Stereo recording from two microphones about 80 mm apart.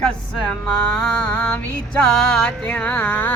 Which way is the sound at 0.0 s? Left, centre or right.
Centre.